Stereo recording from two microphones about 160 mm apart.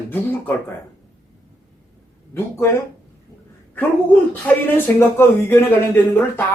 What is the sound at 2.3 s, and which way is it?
Speech, 15° left (ahead or behind).